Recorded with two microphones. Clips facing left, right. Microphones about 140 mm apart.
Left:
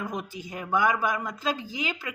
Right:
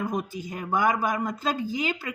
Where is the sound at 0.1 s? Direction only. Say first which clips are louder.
Right 4 dB; 45° right (ahead or behind).